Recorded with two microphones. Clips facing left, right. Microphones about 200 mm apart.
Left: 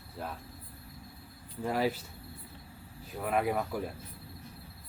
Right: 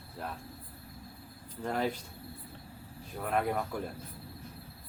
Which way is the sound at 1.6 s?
5° left (ahead or behind).